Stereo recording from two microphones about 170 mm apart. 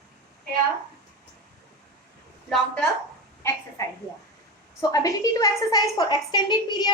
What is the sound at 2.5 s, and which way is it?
Speech, 5° left (ahead or behind).